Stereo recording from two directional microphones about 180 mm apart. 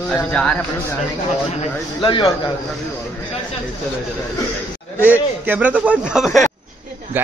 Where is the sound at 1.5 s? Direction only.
30° left (ahead or behind).